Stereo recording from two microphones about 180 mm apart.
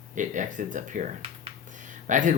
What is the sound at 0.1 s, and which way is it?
Speech, 45° right (ahead or behind).